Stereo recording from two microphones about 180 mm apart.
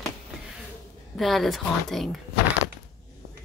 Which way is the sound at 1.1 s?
Centre (ahead or behind).